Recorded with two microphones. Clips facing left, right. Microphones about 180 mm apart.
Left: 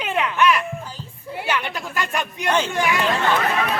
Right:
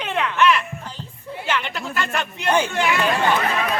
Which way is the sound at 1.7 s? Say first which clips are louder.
Even; 10° left (ahead or behind).